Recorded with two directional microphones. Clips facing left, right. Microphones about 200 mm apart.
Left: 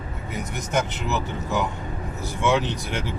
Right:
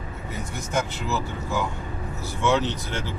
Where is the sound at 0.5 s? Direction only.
20° left (ahead or behind).